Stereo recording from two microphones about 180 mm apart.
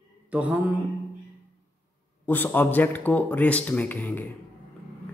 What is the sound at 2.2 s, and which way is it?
Speech, 10° left (ahead or behind).